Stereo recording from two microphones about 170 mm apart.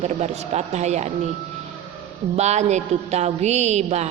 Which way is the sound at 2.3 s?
40° right (ahead or behind).